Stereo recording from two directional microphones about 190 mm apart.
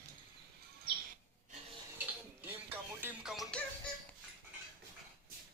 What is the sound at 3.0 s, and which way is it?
Music, centre (ahead or behind).